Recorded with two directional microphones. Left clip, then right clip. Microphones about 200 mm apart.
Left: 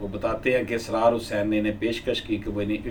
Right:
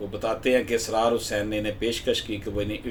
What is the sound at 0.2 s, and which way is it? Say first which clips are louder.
Speech: right 1 dB; 45° right (ahead or behind).